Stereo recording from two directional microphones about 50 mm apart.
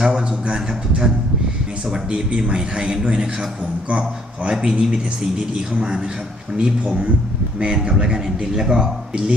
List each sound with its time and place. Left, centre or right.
0.0 s a man's voice: centre
4.5 s a man's voice: centre